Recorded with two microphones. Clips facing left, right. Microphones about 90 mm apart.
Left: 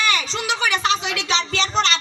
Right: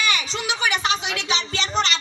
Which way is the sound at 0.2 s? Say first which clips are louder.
Left 2 dB; 15° right (ahead or behind).